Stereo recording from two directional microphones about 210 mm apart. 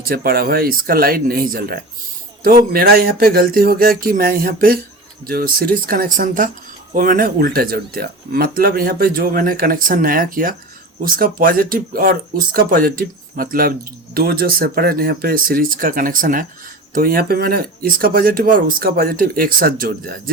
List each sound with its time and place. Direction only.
0.0 s speech: 45° right (ahead or behind)